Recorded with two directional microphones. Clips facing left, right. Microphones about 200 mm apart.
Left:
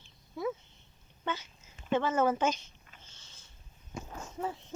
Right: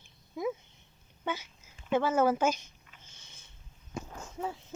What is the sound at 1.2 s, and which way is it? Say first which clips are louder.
Speech: right 1 dB; 10° right (ahead or behind).